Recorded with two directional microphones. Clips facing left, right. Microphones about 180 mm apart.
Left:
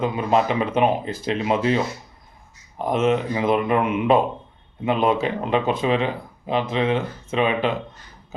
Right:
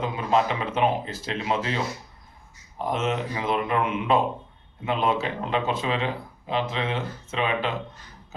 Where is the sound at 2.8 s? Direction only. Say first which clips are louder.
Left 6 dB; 15° left (ahead or behind).